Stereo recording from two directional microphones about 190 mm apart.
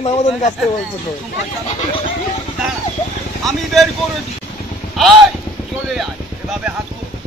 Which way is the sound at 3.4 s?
Centre (ahead or behind).